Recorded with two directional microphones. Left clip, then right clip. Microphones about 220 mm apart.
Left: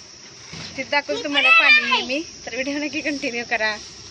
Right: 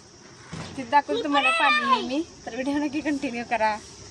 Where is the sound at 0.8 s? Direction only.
15° right (ahead or behind).